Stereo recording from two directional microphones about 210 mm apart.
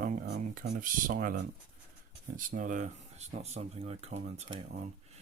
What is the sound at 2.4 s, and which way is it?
Speech, 40° right (ahead or behind).